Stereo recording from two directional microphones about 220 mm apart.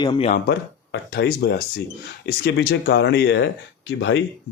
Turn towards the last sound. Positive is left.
turn(degrees=55)  # may be behind; listen again after turning